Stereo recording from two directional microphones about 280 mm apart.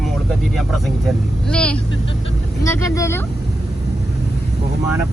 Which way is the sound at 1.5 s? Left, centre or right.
Centre.